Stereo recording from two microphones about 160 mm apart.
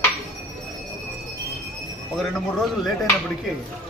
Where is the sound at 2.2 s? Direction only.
Centre (ahead or behind).